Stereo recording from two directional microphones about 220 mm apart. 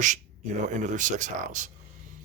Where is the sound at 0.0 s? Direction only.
35° right (ahead or behind).